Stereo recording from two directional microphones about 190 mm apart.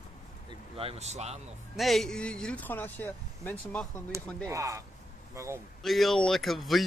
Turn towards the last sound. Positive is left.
turn(degrees=0)  # may be behind; listen again after turning